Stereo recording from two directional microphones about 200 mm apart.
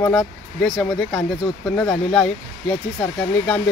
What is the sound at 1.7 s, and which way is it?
Speech, 5° left (ahead or behind).